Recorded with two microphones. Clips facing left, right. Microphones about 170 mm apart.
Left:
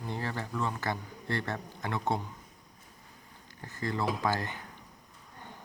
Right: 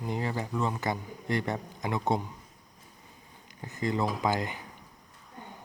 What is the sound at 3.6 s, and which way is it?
Speech, 20° right (ahead or behind).